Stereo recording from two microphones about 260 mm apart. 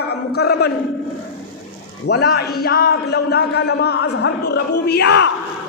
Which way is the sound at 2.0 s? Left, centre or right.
Left.